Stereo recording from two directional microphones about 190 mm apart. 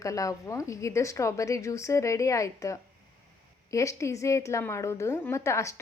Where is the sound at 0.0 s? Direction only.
15° left (ahead or behind).